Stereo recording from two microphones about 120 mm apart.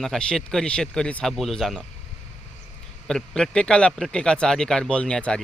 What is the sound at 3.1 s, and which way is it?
Speech, 5° left (ahead or behind).